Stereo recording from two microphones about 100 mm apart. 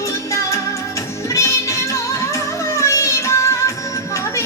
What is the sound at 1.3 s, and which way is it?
Music, 30° left (ahead or behind).